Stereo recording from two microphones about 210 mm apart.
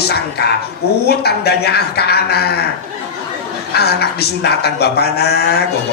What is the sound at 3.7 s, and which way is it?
Speech, 50° left (ahead or behind).